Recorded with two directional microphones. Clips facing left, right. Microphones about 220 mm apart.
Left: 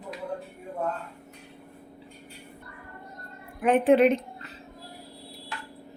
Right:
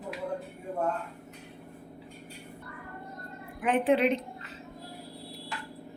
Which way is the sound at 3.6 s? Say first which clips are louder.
Left 5 dB; 50° left (ahead or behind).